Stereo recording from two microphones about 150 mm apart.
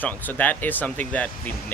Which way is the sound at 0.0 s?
10° left (ahead or behind).